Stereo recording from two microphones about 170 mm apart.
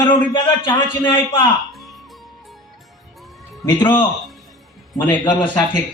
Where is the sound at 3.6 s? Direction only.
25° left (ahead or behind).